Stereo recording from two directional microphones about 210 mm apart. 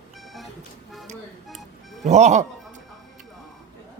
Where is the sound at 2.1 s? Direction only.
35° right (ahead or behind).